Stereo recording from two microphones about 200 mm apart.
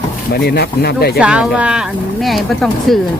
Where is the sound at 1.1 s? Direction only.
5° right (ahead or behind).